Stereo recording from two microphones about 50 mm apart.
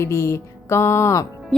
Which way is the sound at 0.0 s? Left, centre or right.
Left.